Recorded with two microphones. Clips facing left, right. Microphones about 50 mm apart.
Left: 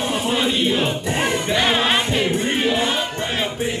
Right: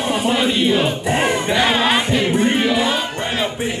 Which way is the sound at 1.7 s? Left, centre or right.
Centre.